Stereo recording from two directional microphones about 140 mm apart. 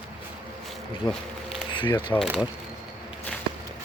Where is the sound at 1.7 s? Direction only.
35° left (ahead or behind).